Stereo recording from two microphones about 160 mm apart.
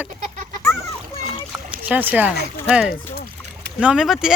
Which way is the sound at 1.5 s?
10° right (ahead or behind).